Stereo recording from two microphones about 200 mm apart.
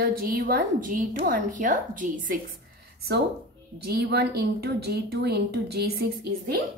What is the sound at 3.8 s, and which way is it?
A woman's voice, 50° right (ahead or behind).